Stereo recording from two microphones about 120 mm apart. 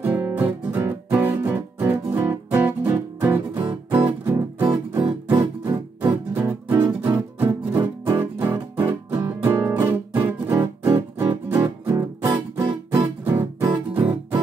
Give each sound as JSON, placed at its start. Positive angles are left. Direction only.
{"t": 0.0, "sound": "music", "side_deg": -15}
{"t": 6.8, "sound": "music", "side_deg": -15}
{"t": 11.9, "sound": "music", "side_deg": -25}